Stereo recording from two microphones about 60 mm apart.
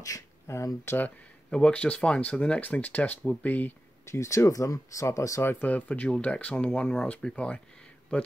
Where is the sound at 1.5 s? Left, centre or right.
Centre.